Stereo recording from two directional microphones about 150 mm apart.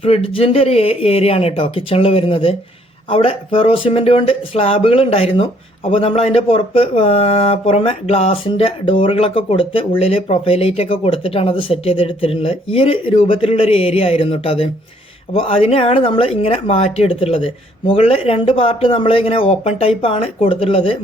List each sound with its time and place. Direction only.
0.0 s speech: 40° left (ahead or behind)